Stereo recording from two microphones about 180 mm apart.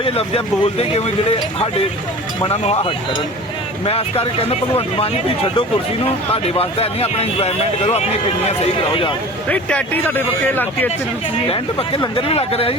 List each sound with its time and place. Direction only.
0.0 s speech: 30° left (ahead or behind)
2.4 s speech: 35° left (ahead or behind)
9.5 s speech: 10° left (ahead or behind)
11.4 s speech: 30° left (ahead or behind)